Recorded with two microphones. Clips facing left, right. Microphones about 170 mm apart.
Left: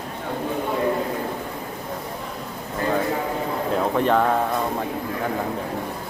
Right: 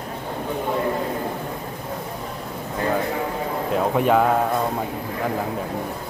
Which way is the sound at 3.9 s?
10° right (ahead or behind).